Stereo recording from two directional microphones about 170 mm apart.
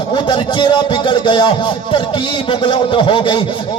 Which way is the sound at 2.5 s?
30° left (ahead or behind).